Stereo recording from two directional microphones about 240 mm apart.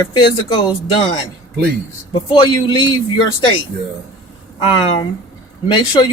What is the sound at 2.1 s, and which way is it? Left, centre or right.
Speech, centre.